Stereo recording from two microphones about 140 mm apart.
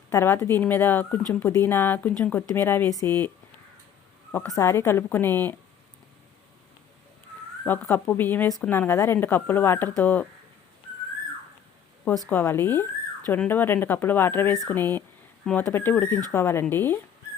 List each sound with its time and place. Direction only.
0.1 s speech: 20° left (ahead or behind)
4.4 s speech: 20° left (ahead or behind)
7.6 s speech: 15° left (ahead or behind)
12.3 s speech: 20° left (ahead or behind)